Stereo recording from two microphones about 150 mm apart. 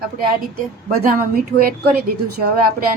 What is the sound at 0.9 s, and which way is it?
Speech, 75° right (ahead or behind).